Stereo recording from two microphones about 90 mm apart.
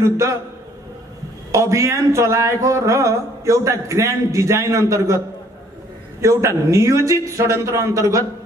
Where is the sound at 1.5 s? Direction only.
35° right (ahead or behind).